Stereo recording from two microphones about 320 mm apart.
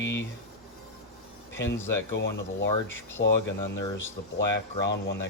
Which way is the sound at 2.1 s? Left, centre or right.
Left.